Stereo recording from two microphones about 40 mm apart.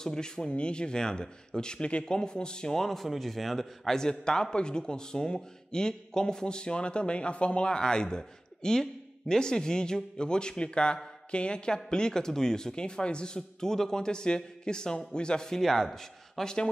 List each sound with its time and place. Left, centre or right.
0.0 s speech: centre
0.5 s a man's voice: left
2.8 s a man's voice: centre
15.6 s a man's voice: centre